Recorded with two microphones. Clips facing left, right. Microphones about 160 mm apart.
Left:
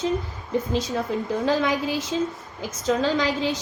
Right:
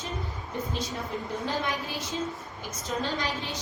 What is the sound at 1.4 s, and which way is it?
A woman's voice, 90° left.